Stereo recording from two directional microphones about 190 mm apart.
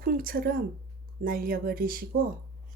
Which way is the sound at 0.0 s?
50° right (ahead or behind).